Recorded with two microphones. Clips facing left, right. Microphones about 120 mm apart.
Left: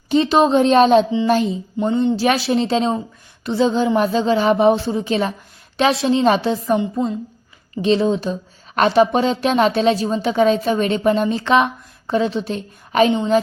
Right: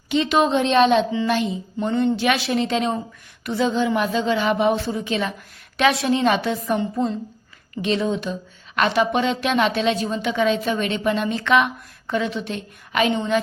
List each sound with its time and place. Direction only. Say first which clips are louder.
0.1 s a woman's voice: left 4 dB; 35° left (ahead or behind)
1.9 s speech: left 2 dB; 20° left (ahead or behind)
2.1 s a woman's voice: left 4 dB; 35° left (ahead or behind)
7.8 s a woman's voice: left 5 dB; 30° left (ahead or behind)